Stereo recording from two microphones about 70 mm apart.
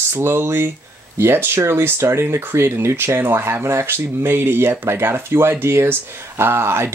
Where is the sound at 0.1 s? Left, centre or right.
Right.